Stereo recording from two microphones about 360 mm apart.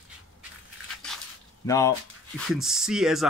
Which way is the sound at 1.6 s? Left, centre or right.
Centre.